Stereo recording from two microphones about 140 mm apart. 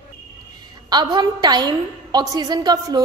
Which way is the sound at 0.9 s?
30° right (ahead or behind).